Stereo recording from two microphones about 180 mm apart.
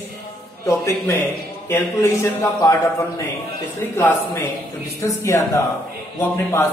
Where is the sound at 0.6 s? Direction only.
15° left (ahead or behind).